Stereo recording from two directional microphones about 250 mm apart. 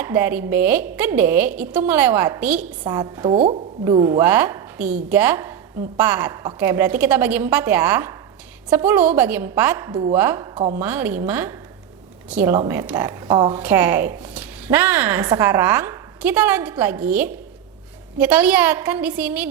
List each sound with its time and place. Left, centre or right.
0.0 s speech: centre
10.5 s a woman's voice: right
10.8 s a woman's voice: centre